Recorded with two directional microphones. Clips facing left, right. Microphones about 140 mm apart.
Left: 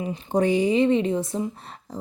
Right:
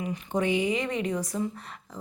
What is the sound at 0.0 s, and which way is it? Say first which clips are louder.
A woman's voice: left 5 dB; 30° left (ahead or behind).